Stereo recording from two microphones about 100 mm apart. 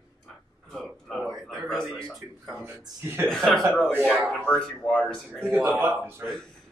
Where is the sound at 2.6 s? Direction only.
20° right (ahead or behind).